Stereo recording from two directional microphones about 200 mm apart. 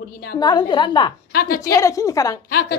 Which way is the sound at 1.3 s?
50° left (ahead or behind).